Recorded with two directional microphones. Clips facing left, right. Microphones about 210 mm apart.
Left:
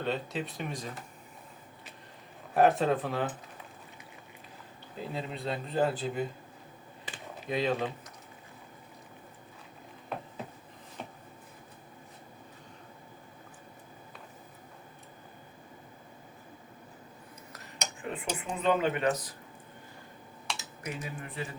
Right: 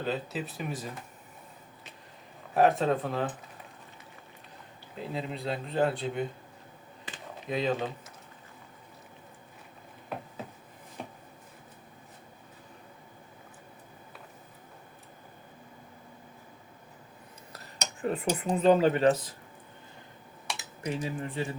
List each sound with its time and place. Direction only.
0.0 s speech: 5° right (ahead or behind)
2.6 s speech: centre (ahead or behind)
4.9 s speech: centre (ahead or behind)
7.4 s speech: centre (ahead or behind)
17.5 s cutlery: 35° right (ahead or behind)
20.6 s speech: 30° right (ahead or behind)